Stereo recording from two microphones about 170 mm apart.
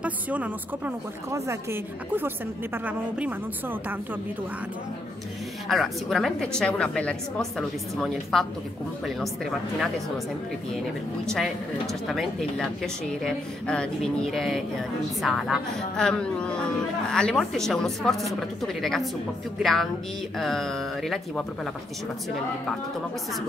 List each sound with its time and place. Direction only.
0.0 s a woman's voice: 10° right (ahead or behind)
5.7 s speech: centre (ahead or behind)
11.2 s speech: centre (ahead or behind)